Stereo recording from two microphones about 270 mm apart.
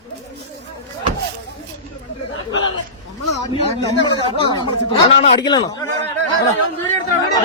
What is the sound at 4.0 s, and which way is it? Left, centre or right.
A man's voice, centre.